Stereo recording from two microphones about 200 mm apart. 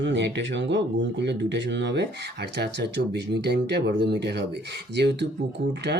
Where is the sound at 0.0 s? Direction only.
60° right (ahead or behind).